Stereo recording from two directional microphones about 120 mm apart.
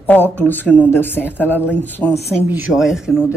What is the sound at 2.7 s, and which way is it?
Speech, centre (ahead or behind).